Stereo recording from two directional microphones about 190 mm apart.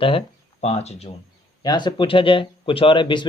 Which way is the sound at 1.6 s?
25° left (ahead or behind).